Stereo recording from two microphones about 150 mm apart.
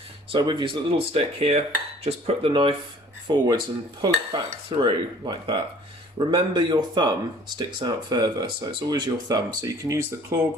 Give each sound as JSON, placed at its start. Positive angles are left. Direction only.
{"t": 0.3, "sound": "speech", "side_deg": -30}